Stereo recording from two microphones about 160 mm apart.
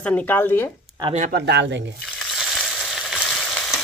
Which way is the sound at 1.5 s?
90° right.